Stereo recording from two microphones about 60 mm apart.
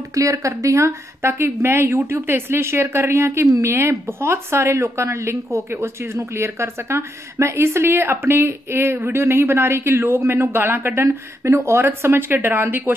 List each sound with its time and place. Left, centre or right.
0.1 s a woman's voice: right